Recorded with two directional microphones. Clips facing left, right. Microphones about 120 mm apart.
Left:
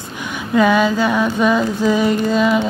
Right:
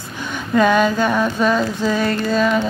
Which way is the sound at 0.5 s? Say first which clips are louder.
Left 1 dB; 10° left (ahead or behind).